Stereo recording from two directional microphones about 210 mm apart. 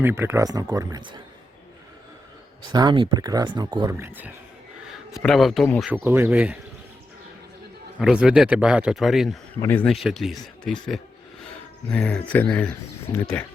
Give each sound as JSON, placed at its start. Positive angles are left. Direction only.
{"t": 0.0, "sound": "speech", "side_deg": -10}
{"t": 2.7, "sound": "speech", "side_deg": -20}
{"t": 5.1, "sound": "a man's voice", "side_deg": 0}
{"t": 5.9, "sound": "speech", "side_deg": -10}
{"t": 7.9, "sound": "a man's voice", "side_deg": -5}
{"t": 9.6, "sound": "a man's voice", "side_deg": 10}